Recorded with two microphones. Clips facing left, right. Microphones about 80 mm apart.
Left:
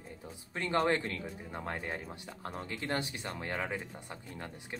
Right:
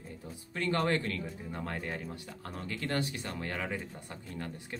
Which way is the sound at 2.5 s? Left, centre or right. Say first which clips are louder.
Even; left.